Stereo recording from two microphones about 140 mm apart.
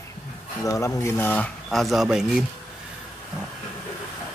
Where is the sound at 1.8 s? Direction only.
Centre (ahead or behind).